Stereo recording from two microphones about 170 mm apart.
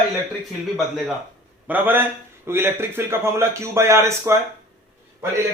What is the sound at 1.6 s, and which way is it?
A man's voice, 10° right (ahead or behind).